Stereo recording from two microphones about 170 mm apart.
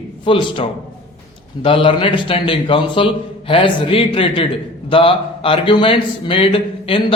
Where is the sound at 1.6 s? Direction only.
30° left (ahead or behind).